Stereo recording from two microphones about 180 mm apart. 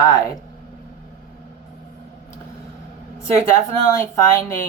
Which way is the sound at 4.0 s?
15° left (ahead or behind).